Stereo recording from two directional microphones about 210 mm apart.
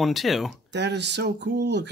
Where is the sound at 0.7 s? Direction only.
55° right (ahead or behind).